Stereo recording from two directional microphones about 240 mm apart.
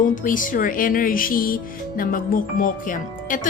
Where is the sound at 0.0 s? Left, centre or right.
Left.